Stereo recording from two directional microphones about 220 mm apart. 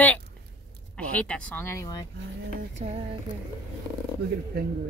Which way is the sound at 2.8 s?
25° right (ahead or behind).